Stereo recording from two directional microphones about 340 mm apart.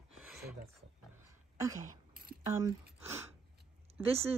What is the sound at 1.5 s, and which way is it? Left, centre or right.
Speech, centre.